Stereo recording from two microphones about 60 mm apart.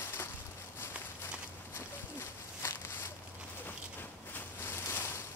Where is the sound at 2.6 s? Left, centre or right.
Left.